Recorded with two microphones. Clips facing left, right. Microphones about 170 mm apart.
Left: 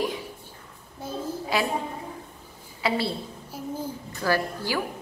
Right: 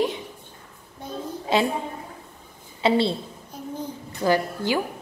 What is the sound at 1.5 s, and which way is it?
Speech, 25° right (ahead or behind).